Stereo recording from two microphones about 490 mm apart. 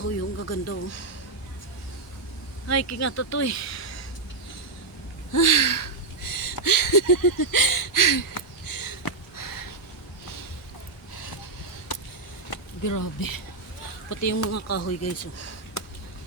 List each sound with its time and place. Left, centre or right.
0.0 s speech: left
2.6 s speech: left
5.3 s a sound: left
12.8 s speech: left